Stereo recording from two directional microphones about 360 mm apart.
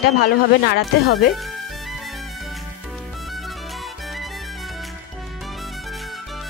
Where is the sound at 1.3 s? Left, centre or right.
Centre.